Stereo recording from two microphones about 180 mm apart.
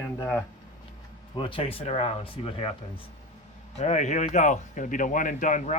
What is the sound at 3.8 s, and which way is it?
Speech, 40° left (ahead or behind).